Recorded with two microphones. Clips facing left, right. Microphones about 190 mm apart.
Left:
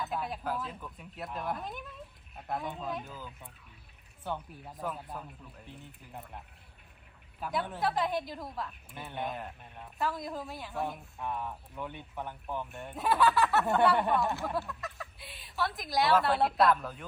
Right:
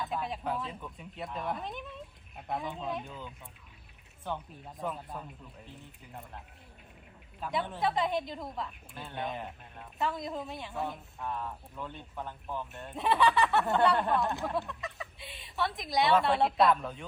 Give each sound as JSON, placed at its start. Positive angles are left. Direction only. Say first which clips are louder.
{"t": 0.0, "sound": "a woman's voice", "louder": "right 1 dB", "side_deg": 0}
{"t": 7.3, "sound": "a woman's voice", "louder": "even", "side_deg": 5}
{"t": 8.9, "sound": "speech", "louder": "even", "side_deg": 20}
{"t": 9.1, "sound": "a woman's voice", "louder": "even", "side_deg": 0}
{"t": 11.2, "sound": "speech", "louder": "left 1 dB", "side_deg": 15}
{"t": 12.9, "sound": "a woman's voice", "louder": "even", "side_deg": 0}